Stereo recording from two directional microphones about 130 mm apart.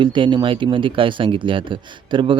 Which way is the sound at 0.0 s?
40° right (ahead or behind).